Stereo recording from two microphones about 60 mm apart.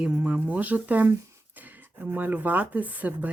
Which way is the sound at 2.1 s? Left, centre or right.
Right.